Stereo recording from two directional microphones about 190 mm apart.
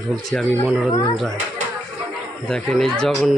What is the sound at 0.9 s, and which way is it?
Speech, 25° left (ahead or behind).